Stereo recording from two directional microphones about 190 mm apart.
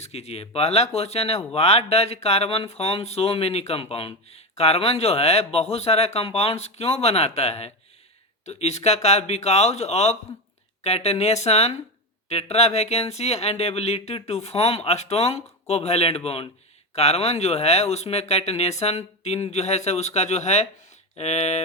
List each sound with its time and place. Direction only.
0.0 s speech: 35° left (ahead or behind)